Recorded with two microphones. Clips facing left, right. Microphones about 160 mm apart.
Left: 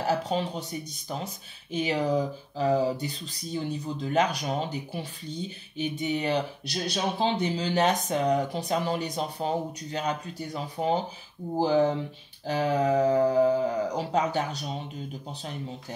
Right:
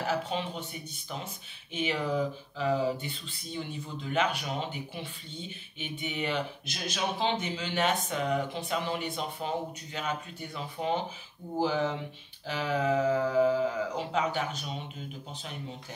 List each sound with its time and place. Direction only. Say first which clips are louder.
0.0 s speech: left 4 dB; 40° left (ahead or behind)